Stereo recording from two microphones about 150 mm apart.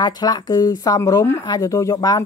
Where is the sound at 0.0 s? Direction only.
25° left (ahead or behind).